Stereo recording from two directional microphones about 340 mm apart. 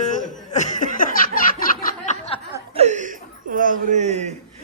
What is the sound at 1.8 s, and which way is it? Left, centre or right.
Snicker, left.